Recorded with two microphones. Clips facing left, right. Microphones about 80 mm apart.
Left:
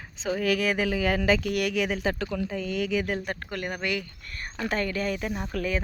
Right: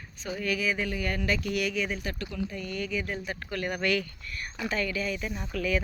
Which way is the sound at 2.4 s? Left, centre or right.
Left.